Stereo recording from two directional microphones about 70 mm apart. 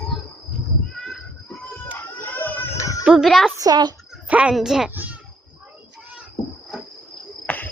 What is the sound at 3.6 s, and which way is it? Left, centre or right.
Speech, right.